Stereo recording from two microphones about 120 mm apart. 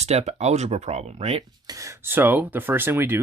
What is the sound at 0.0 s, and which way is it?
Speech, 65° right (ahead or behind).